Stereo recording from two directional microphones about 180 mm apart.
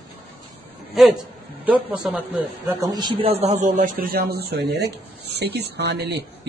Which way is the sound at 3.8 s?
55° right (ahead or behind).